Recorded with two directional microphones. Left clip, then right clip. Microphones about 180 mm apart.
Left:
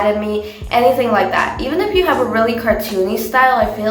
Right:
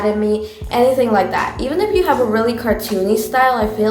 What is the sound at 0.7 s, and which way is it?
A woman's voice, 45° right (ahead or behind).